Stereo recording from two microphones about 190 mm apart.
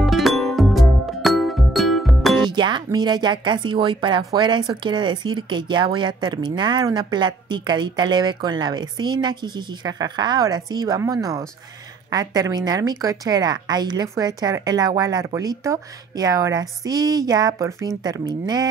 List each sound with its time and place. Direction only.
0.0 s music: centre (ahead or behind)
2.4 s speech: 25° right (ahead or behind)